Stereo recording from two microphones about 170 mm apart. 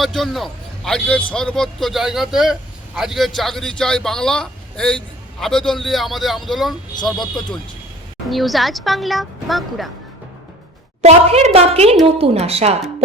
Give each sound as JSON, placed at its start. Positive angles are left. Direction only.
{"t": 0.0, "sound": "a man's voice", "side_deg": 0}
{"t": 11.0, "sound": "a woman's voice", "side_deg": -40}